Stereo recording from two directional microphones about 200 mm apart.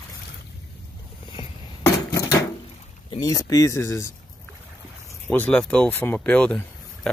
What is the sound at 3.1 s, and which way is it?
Speech, 20° left (ahead or behind).